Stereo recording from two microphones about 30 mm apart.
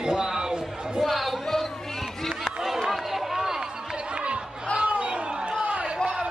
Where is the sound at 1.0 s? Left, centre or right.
Centre.